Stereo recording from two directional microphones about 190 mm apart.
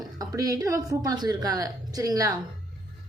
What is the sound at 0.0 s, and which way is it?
Speech, 20° right (ahead or behind).